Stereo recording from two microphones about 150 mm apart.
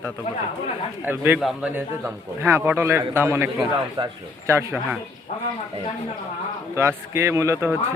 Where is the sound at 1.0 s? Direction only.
10° right (ahead or behind).